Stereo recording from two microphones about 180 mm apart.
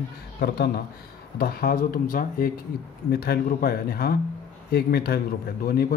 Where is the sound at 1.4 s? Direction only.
55° left (ahead or behind).